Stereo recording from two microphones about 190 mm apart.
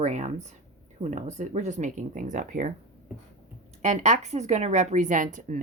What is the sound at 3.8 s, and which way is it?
A woman's voice, 40° right (ahead or behind).